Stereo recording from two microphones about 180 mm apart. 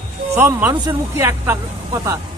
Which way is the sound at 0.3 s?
10° right (ahead or behind).